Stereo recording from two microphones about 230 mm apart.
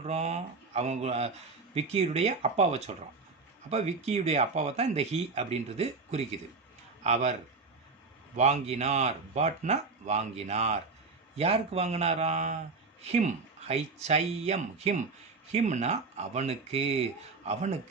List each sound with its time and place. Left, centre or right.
0.0 s speech: right
8.4 s speech: right